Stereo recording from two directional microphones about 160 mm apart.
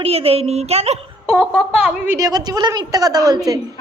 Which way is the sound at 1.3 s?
5° right (ahead or behind).